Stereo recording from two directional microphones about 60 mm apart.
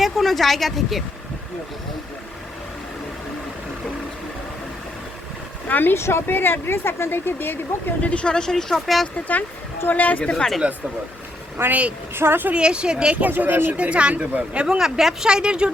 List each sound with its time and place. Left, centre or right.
0.0 s speech: centre
5.6 s speech: left
6.0 s speech: left
8.0 s a woman's voice: centre
9.9 s speech: left
10.3 s a woman's voice: centre
11.5 s speech: right
12.5 s speech: centre
13.1 s speech: right
13.7 s speech: right